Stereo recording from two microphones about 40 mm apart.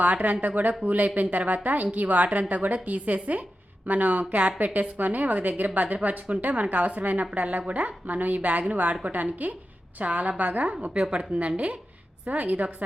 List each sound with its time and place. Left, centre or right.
0.0 s a woman's voice: right